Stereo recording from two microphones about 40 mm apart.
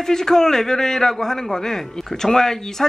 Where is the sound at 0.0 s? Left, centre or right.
Centre.